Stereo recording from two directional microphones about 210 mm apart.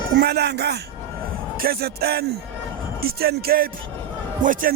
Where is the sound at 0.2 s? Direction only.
50° right (ahead or behind).